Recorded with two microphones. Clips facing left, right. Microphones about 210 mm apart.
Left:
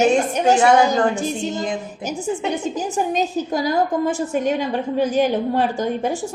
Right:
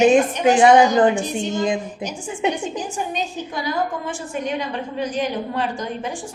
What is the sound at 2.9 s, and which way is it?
A woman's voice, 40° left (ahead or behind).